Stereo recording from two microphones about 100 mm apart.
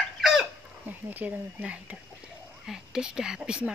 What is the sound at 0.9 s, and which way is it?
Speech, 20° right (ahead or behind).